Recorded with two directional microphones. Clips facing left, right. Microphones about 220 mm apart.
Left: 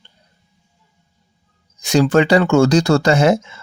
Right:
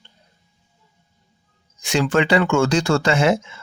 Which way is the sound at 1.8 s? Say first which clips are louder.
Left 5 dB; 40° left (ahead or behind).